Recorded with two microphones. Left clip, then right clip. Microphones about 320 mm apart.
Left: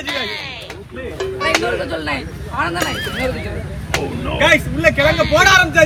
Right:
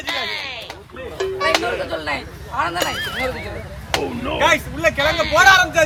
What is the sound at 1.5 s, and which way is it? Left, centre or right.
Speech, right.